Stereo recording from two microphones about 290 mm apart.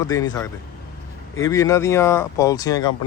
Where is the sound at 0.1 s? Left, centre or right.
Centre.